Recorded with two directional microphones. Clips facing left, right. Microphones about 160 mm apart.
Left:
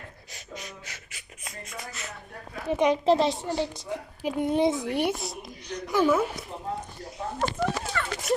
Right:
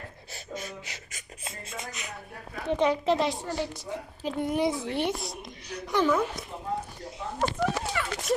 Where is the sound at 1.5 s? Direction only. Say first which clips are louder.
Right 1 dB; 20° right (ahead or behind).